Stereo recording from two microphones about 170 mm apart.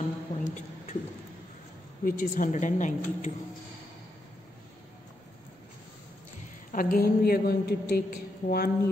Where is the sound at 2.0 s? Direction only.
55° left (ahead or behind).